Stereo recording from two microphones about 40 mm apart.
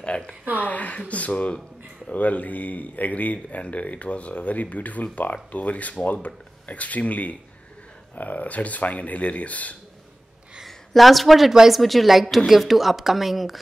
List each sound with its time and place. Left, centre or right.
0.0 s a woman's voice: left
0.6 s speech: left
10.9 s speech: centre